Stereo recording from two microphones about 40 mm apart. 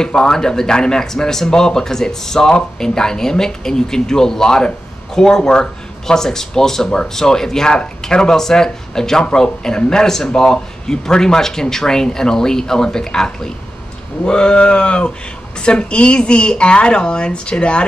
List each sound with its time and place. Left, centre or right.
0.0 s speech: centre